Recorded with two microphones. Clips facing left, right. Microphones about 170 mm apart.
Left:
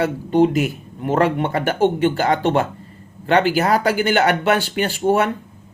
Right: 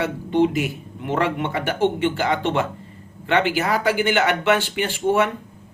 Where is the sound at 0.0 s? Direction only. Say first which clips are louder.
Left 3 dB; 40° left (ahead or behind).